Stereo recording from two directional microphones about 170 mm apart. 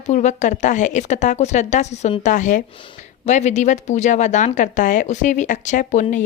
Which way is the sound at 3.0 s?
45° left (ahead or behind).